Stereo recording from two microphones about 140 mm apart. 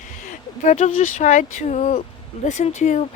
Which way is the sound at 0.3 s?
60° left (ahead or behind).